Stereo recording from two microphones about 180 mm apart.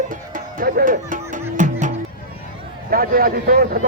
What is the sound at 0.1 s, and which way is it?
Music, 50° right (ahead or behind).